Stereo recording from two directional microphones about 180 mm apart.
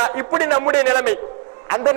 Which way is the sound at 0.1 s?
15° right (ahead or behind).